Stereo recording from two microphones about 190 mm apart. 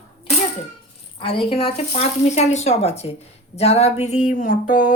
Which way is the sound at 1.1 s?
30° left (ahead or behind).